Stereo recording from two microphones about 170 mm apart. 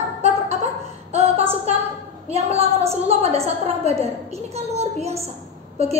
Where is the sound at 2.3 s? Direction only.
35° right (ahead or behind).